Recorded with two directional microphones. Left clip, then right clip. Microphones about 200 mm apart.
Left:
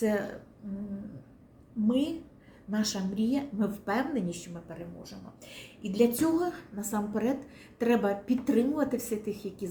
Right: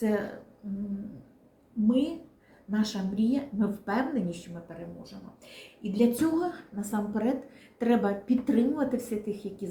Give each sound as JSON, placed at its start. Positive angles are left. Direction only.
{"t": 0.0, "sound": "a woman's voice", "side_deg": 25}
{"t": 1.9, "sound": "a woman's voice", "side_deg": 20}
{"t": 5.5, "sound": "a woman's voice", "side_deg": 25}